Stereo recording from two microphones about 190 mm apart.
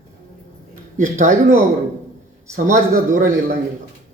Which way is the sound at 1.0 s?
40° right (ahead or behind).